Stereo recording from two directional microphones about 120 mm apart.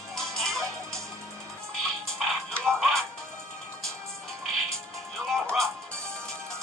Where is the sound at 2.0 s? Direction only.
Centre (ahead or behind).